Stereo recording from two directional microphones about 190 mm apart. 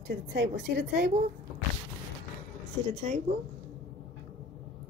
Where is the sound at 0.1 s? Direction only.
65° right (ahead or behind).